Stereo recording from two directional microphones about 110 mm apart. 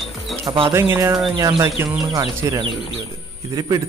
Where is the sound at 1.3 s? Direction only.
35° right (ahead or behind).